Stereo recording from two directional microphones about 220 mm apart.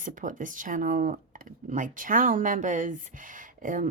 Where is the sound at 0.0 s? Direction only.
35° right (ahead or behind).